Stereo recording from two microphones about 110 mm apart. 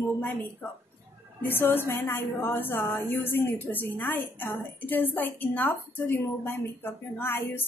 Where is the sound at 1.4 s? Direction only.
20° left (ahead or behind).